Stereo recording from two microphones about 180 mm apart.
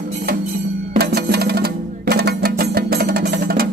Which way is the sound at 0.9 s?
60° right (ahead or behind).